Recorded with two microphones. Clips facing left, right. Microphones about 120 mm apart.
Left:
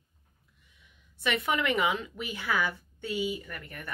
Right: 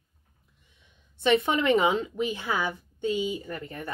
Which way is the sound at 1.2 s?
25° right (ahead or behind).